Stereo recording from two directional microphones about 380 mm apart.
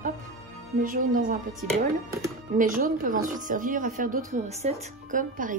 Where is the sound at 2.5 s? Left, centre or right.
Right.